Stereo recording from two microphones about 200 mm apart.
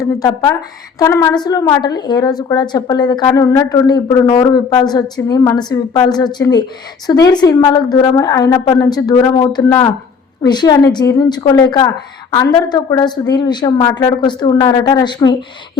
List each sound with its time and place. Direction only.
0.9 s a woman's voice: 15° left (ahead or behind)